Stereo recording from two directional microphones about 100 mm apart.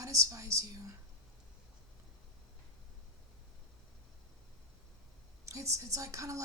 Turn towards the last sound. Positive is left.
turn(degrees=-30)  # may be behind; listen again after turning